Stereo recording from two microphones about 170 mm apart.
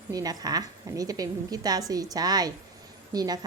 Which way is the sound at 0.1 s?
20° right (ahead or behind).